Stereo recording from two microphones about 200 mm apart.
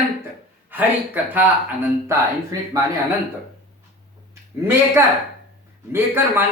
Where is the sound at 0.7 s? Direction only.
10° right (ahead or behind).